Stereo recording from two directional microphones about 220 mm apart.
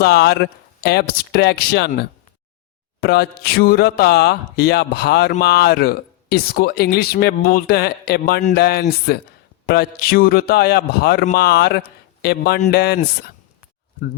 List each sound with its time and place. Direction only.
0.0 s speech: 50° left (ahead or behind)